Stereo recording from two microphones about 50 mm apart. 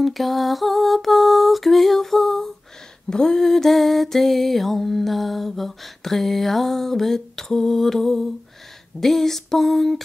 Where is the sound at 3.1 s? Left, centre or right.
Centre.